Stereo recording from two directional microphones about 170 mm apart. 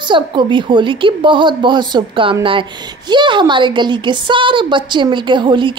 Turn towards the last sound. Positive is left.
turn(degrees=-30)  # may be behind; listen again after turning